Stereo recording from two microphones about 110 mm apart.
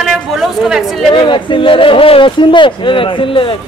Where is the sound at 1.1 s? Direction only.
50° left (ahead or behind).